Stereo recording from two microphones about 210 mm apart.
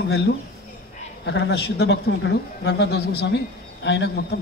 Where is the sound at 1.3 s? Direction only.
55° left (ahead or behind).